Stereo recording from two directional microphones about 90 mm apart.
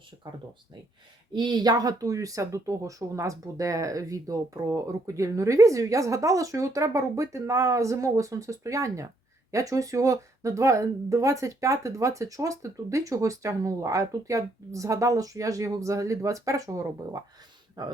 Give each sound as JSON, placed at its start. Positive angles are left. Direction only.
{"t": 0.2, "sound": "speech", "side_deg": -50}
{"t": 17.8, "sound": "speech", "side_deg": -50}